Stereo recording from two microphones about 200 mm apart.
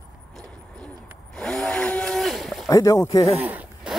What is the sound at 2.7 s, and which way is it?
Speech, 15° left (ahead or behind).